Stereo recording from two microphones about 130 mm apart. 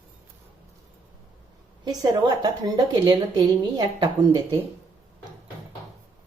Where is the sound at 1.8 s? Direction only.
30° right (ahead or behind).